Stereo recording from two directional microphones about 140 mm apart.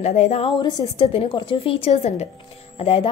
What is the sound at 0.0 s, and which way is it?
A woman's voice, 50° left (ahead or behind).